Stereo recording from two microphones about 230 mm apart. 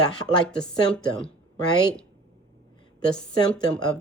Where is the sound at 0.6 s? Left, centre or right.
Centre.